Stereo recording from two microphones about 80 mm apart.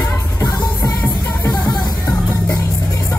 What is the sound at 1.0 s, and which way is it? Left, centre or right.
Music, left.